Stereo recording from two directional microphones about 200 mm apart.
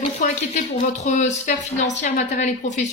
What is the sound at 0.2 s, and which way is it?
A woman's voice, 35° left (ahead or behind).